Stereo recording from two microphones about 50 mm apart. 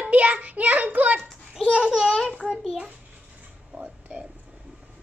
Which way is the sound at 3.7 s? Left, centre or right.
Right.